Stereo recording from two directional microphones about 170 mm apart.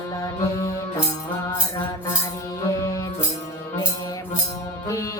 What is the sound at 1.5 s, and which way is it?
Music, 15° left (ahead or behind).